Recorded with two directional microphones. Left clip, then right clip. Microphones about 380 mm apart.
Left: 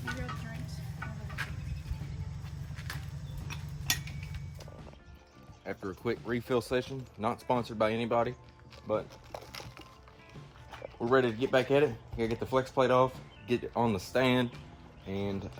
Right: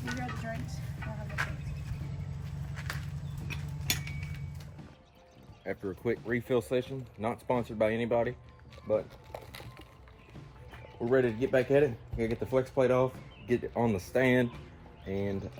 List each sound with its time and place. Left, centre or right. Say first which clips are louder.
0.0 s vehicle: right 1 dB; centre
3.5 s mechanisms: left 1 dB; centre
5.6 s speech: right 2 dB; centre
8.9 s music: right 2 dB; centre
11.0 s speech: even; centre